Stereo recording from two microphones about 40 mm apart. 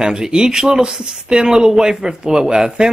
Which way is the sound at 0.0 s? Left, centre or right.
Centre.